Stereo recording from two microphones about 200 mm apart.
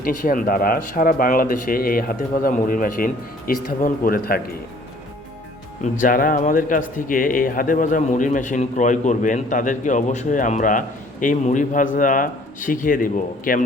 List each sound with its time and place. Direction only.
0.0 s speech: 45° left (ahead or behind)
5.8 s a man's voice: 40° left (ahead or behind)